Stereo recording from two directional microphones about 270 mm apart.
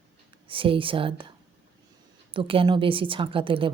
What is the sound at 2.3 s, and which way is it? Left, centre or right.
A woman's voice, centre.